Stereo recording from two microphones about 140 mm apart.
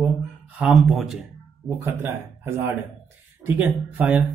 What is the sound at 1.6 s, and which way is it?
Speech, 15° right (ahead or behind).